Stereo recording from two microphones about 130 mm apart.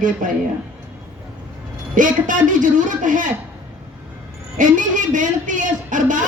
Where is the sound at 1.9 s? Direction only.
90° right.